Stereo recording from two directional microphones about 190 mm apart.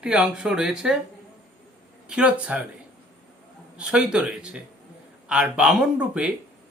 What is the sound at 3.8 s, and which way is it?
Speech, 5° right (ahead or behind).